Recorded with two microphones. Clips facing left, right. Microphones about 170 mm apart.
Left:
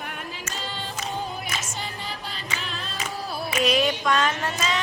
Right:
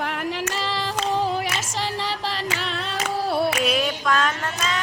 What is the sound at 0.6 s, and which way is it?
Female singing, 90° right.